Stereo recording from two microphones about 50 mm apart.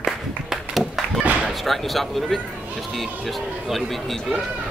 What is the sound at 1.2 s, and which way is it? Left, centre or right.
Slam, right.